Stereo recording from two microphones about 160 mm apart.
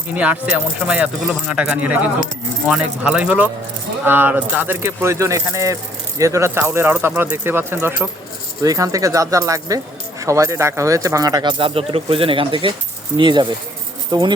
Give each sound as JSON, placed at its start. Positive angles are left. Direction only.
{"t": 0.2, "sound": "speech", "side_deg": -10}